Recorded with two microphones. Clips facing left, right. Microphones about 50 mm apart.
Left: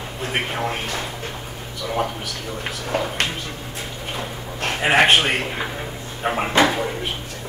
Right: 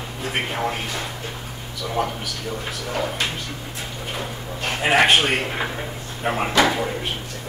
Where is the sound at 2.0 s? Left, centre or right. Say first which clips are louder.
Even; left.